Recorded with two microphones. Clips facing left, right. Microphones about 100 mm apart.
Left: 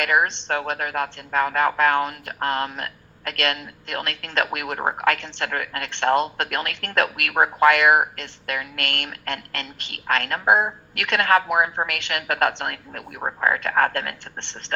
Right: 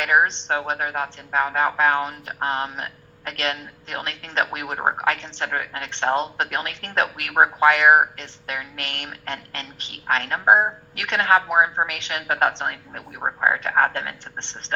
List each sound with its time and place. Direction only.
0.0 s a woman's voice: 25° right (ahead or behind)